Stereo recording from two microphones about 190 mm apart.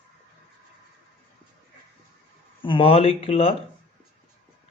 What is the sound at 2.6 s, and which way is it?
Speech, 30° left (ahead or behind).